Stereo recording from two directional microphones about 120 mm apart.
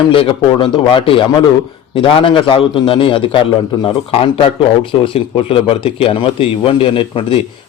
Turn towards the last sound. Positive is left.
turn(degrees=50)  # may be behind; listen again after turning